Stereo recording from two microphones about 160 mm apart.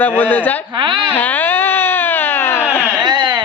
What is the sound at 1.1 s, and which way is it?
Baby cry, 10° left (ahead or behind).